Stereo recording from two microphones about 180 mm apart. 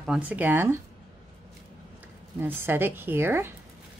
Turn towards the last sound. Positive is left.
turn(degrees=-10)  # may be behind; listen again after turning